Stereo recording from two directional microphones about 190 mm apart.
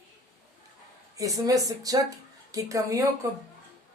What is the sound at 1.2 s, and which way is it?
Speech, 20° right (ahead or behind).